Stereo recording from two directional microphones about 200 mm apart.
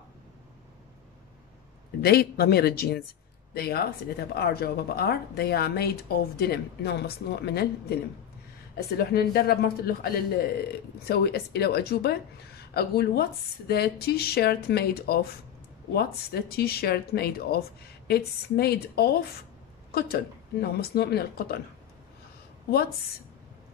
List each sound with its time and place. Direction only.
2.0 s speech: 55° left (ahead or behind)
8.9 s a woman's voice: 50° left (ahead or behind)